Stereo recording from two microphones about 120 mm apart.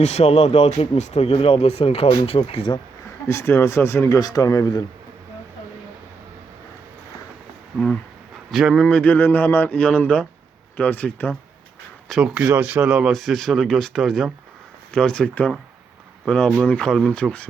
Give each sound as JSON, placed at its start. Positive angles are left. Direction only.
{"t": 0.0, "sound": "speech", "side_deg": 65}
{"t": 3.2, "sound": "speech", "side_deg": 20}
{"t": 8.4, "sound": "speech", "side_deg": 0}
{"t": 8.9, "sound": "speech", "side_deg": 15}
{"t": 12.0, "sound": "speech", "side_deg": -5}